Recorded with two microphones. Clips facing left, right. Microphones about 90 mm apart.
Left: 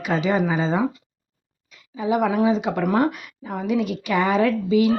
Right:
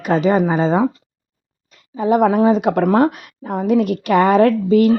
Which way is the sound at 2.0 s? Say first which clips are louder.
Right 6 dB; 45° right (ahead or behind).